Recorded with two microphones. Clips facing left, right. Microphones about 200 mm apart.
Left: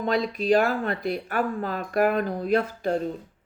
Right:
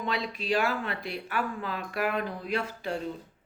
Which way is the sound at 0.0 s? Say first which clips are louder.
Left 8 dB; 45° left (ahead or behind).